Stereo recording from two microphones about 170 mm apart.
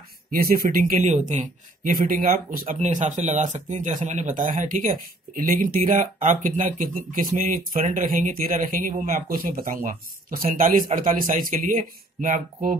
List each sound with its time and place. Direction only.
0.3 s speech: 60° right (ahead or behind)
2.7 s speech: 45° right (ahead or behind)